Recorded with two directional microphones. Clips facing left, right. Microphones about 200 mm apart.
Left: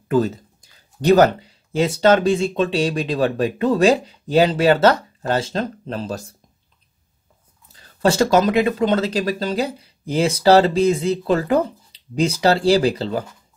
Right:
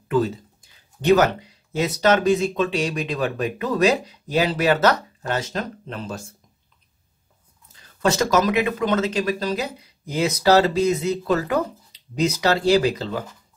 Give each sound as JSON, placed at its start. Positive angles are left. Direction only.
{"t": 0.1, "sound": "speech", "side_deg": 40}
{"t": 7.7, "sound": "speech", "side_deg": 30}